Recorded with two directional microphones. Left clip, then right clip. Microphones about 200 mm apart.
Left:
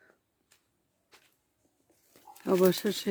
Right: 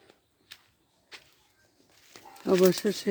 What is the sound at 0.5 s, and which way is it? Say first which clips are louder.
Whip: right 17 dB; centre (ahead or behind).